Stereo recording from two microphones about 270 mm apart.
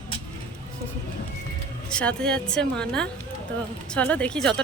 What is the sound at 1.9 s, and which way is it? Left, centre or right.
Speech, centre.